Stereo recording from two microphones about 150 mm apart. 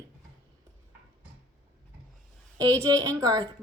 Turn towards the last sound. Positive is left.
turn(degrees=-25)  # may be behind; listen again after turning